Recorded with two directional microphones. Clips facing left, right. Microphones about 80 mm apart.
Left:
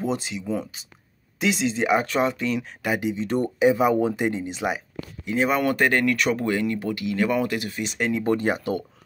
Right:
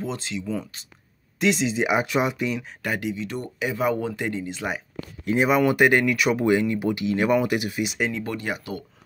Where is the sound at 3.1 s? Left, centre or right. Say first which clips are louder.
Left 6 dB; left.